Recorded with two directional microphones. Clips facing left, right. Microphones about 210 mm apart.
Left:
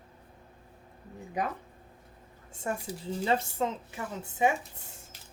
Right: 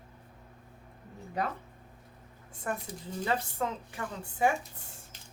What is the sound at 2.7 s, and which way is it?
Speech, 20° left (ahead or behind).